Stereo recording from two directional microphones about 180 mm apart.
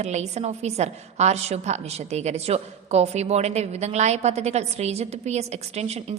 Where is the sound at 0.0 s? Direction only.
40° right (ahead or behind).